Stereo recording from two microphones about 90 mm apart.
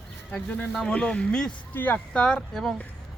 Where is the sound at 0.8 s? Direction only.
10° left (ahead or behind).